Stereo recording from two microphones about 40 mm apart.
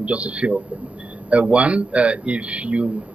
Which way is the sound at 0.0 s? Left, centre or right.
Right.